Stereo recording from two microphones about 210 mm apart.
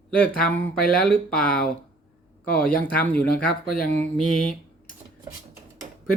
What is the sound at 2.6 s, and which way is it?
Speech, 5° left (ahead or behind).